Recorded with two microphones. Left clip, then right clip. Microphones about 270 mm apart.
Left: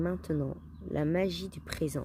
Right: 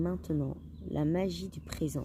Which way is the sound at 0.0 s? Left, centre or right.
Left.